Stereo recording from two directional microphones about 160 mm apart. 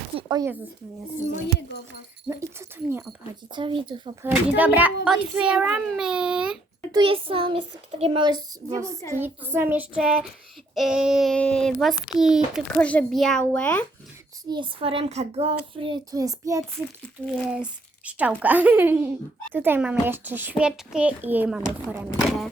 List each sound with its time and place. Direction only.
0.1 s a sound: 30° right (ahead or behind)
2.3 s a child's voice: 15° right (ahead or behind)
3.5 s a child's voice: 30° right (ahead or behind)
4.2 s a child's voice: 10° right (ahead or behind)
6.9 s a child's voice: 35° right (ahead or behind)
9.1 s a child's voice: 15° right (ahead or behind)
12.8 s a child's voice: 10° left (ahead or behind)
14.4 s a child's voice: 30° right (ahead or behind)
16.1 s child singing: 20° right (ahead or behind)
17.5 s a child's voice: 5° right (ahead or behind)